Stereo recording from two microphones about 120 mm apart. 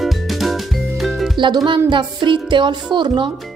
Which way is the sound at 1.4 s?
40° right (ahead or behind).